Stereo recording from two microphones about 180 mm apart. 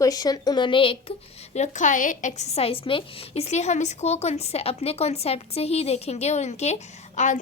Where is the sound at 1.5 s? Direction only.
40° left (ahead or behind).